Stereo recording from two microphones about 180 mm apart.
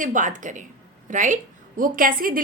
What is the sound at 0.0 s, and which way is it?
A woman's voice, 45° right (ahead or behind).